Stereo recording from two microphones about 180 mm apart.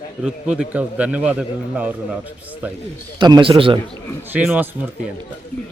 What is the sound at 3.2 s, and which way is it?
Speech, 25° right (ahead or behind).